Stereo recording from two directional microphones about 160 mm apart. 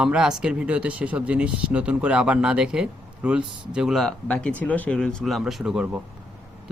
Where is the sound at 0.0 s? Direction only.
5° right (ahead or behind).